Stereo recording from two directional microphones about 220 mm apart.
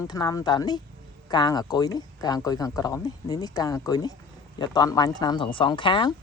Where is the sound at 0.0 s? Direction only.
15° left (ahead or behind).